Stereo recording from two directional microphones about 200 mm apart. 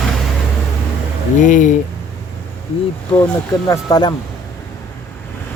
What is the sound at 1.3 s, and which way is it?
Speech, 40° left (ahead or behind).